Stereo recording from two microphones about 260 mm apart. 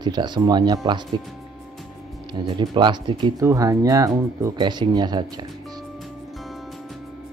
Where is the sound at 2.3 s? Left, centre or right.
Centre.